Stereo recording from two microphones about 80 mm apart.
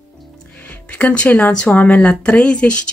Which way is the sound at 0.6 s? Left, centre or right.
Centre.